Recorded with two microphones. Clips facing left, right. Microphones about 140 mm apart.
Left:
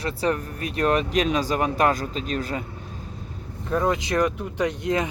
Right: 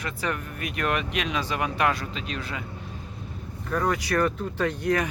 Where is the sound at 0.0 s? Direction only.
35° left (ahead or behind).